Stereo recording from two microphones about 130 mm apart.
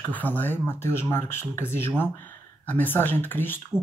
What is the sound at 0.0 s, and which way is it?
Speech, 15° left (ahead or behind).